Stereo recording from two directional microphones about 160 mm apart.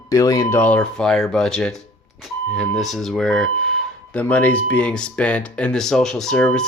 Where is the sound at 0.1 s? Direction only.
20° left (ahead or behind).